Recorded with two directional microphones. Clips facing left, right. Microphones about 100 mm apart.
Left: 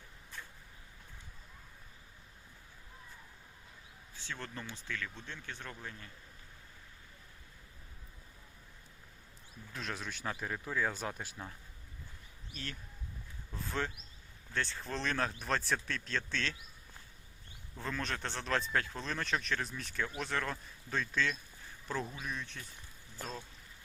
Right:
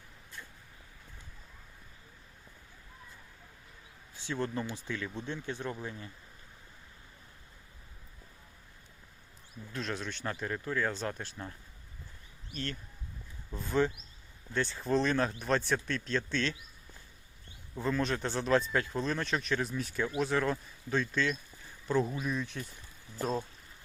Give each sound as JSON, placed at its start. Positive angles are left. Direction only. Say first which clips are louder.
{"t": 4.1, "sound": "speech", "louder": "right 10 dB", "side_deg": -15}
{"t": 9.7, "sound": "speech", "louder": "right 4 dB", "side_deg": 5}
{"t": 13.5, "sound": "speech", "louder": "right 8 dB", "side_deg": 0}
{"t": 17.7, "sound": "speech", "louder": "right 7 dB", "side_deg": -5}